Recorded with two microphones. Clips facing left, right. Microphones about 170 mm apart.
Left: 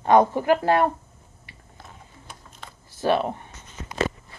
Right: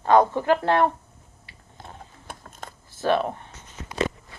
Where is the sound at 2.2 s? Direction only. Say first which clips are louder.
Right 4 dB; 45° right (ahead or behind).